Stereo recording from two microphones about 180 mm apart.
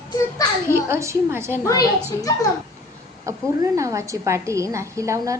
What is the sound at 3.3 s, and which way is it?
A woman's voice, 20° right (ahead or behind).